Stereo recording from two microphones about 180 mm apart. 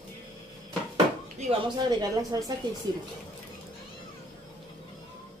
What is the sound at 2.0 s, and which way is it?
Speech, 20° right (ahead or behind).